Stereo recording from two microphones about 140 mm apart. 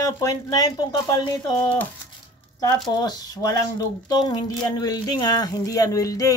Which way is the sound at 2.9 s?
30° left (ahead or behind).